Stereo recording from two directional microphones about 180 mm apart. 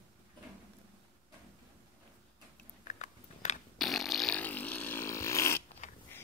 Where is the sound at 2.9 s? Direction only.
40° left (ahead or behind).